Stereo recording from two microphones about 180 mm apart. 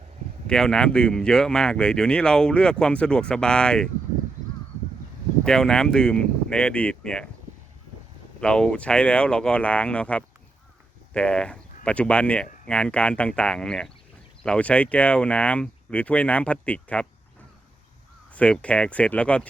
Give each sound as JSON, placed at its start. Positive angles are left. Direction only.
{"t": 0.4, "sound": "speech", "side_deg": 5}
{"t": 5.5, "sound": "speech", "side_deg": 5}
{"t": 8.4, "sound": "speech", "side_deg": 5}
{"t": 18.3, "sound": "speech", "side_deg": 5}